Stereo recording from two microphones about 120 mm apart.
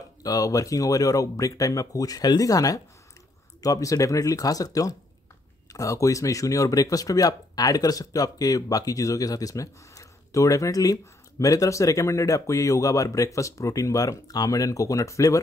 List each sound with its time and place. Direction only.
0.2 s speech: 30° left (ahead or behind)